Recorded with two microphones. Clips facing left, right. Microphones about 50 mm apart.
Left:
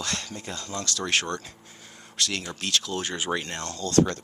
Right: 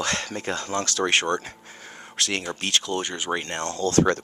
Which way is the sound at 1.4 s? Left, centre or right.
Right.